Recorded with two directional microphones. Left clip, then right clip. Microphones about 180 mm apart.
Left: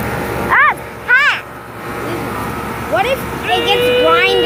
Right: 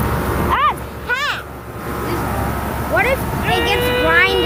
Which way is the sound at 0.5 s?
15° right (ahead or behind).